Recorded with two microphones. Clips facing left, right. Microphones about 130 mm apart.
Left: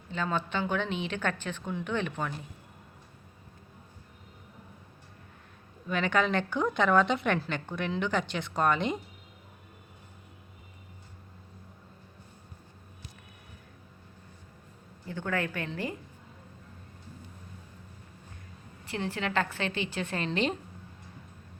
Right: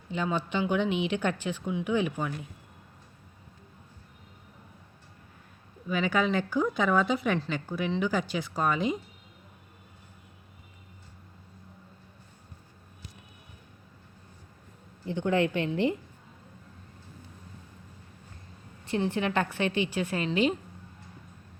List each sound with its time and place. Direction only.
0.1 s speech: 15° right (ahead or behind)
5.9 s a woman's voice: 5° right (ahead or behind)
15.0 s a woman's voice: 20° right (ahead or behind)
18.9 s speech: 20° right (ahead or behind)